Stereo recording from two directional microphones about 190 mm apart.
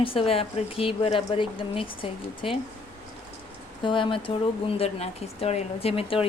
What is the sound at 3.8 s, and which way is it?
Speech, 25° left (ahead or behind).